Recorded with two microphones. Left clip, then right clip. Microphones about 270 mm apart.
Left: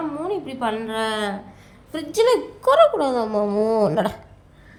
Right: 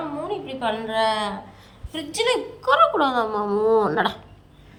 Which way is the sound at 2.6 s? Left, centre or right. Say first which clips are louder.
Left 2 dB; left.